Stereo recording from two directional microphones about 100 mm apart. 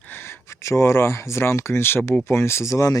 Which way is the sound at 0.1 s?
25° left (ahead or behind).